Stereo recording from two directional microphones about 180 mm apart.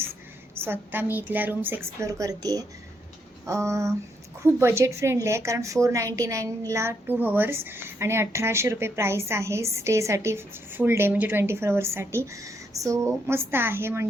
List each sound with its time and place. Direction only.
0.6 s a woman's voice: 10° right (ahead or behind)